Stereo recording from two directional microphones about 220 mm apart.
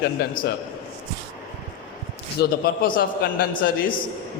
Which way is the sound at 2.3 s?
40° left (ahead or behind).